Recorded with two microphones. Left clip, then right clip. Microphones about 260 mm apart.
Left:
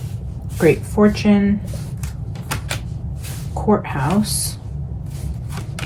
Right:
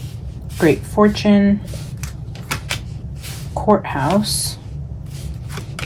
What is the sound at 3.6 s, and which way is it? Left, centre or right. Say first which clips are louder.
Speech: right 3 dB; right.